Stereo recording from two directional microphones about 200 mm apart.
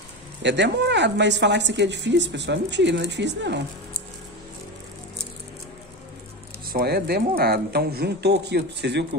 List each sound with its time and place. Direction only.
0.4 s speech: 60° right (ahead or behind)
6.7 s speech: 50° right (ahead or behind)